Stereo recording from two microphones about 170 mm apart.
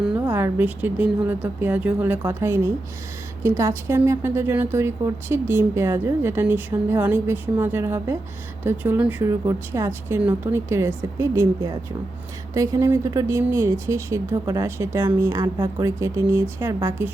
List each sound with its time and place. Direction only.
0.2 s a woman's voice: 15° right (ahead or behind)